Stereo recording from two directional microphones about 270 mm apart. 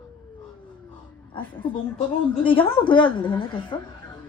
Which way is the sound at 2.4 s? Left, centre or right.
Centre.